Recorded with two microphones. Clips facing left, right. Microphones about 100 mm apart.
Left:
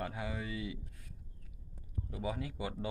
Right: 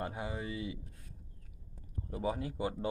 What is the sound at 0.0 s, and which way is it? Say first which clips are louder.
Speech: right 1 dB; 30° right (ahead or behind).